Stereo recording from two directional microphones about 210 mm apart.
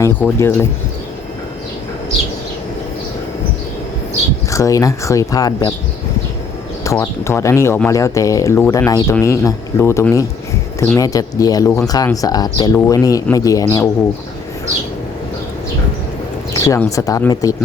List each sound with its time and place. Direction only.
0.0 s speech: 10° left (ahead or behind)
4.5 s speech: 15° left (ahead or behind)
6.8 s speech: 15° left (ahead or behind)
16.6 s speech: 15° left (ahead or behind)